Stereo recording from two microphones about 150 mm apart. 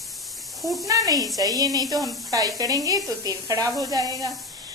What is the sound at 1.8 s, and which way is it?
Speech, centre (ahead or behind).